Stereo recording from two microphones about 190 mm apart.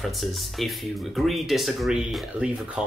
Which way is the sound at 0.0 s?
Centre (ahead or behind).